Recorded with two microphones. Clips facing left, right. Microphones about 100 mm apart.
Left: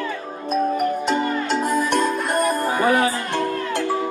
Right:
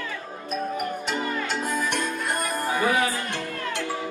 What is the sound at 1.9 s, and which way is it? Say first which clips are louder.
Music: left 7 dB; 40° left (ahead or behind).